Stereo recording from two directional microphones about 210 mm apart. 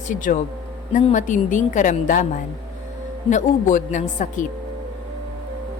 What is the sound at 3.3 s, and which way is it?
A woman's voice, 35° left (ahead or behind).